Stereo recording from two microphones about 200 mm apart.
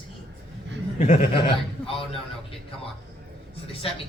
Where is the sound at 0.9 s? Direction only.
35° left (ahead or behind).